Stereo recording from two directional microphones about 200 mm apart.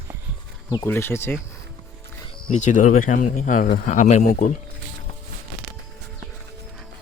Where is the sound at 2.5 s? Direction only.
35° left (ahead or behind).